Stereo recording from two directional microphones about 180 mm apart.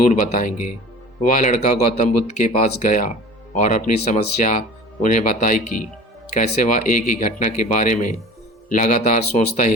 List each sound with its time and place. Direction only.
0.1 s speech: 45° left (ahead or behind)
6.6 s speech: 40° left (ahead or behind)